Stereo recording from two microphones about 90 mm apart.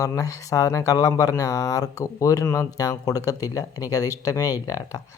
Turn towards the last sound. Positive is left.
turn(degrees=40)  # may be behind; listen again after turning